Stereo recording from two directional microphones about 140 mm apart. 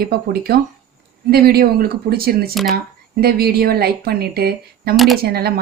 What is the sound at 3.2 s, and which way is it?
Speech, 90° right.